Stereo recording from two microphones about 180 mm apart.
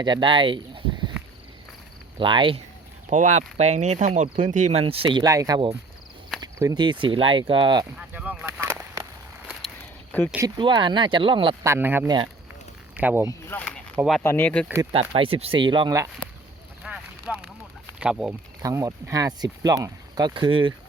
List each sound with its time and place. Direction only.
0.0 s speech: 25° right (ahead or behind)
2.1 s speech: 25° right (ahead or behind)
3.1 s speech: 40° right (ahead or behind); by 7.9 s 25° right (ahead or behind)
8.1 s a sound: 10° right (ahead or behind)
9.5 s a sound: centre (ahead or behind)
10.6 s speech: 25° right (ahead or behind)
11.6 s speech: 15° right (ahead or behind)
12.0 s speech: 25° right (ahead or behind)
13.0 s speech: 10° right (ahead or behind)
13.5 s speech: 10° left (ahead or behind)
15.1 s speech: 30° right (ahead or behind)
16.8 s boat: 5° right (ahead or behind)
18.0 s speech: 5° right (ahead or behind)
18.6 s speech: 20° right (ahead or behind)